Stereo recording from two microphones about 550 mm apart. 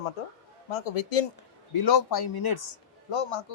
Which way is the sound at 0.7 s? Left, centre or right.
Left.